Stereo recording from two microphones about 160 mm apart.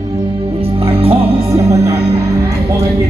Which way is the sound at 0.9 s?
35° right (ahead or behind).